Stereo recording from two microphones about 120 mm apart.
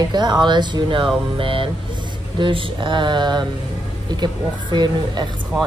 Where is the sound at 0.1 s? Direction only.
35° right (ahead or behind).